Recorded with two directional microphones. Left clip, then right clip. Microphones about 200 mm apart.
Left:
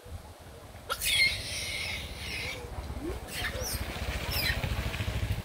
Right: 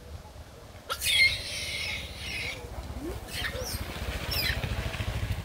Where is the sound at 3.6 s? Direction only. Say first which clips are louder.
Even; 50° right (ahead or behind).